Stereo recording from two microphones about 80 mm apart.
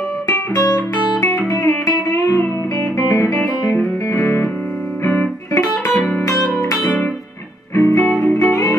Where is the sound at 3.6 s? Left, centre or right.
Left.